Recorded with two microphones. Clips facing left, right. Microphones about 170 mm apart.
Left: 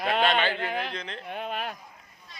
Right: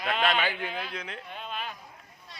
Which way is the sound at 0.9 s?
5° right (ahead or behind).